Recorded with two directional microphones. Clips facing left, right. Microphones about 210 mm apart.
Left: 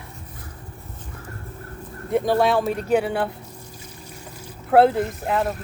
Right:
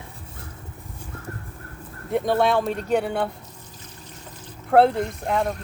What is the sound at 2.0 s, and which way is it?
Speech, centre (ahead or behind).